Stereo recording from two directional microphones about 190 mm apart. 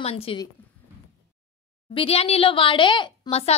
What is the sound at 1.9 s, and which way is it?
A woman's voice, 30° left (ahead or behind).